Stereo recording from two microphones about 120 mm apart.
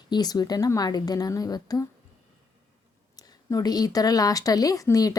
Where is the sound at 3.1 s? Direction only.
30° left (ahead or behind).